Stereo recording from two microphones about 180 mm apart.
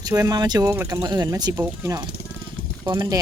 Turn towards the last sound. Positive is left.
turn(degrees=-20)  # may be behind; listen again after turning